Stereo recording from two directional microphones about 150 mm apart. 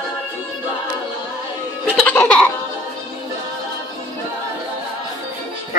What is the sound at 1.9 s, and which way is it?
Music, 10° left (ahead or behind).